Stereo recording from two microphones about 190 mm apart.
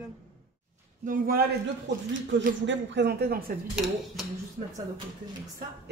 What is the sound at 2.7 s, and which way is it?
Speech, 60° right (ahead or behind).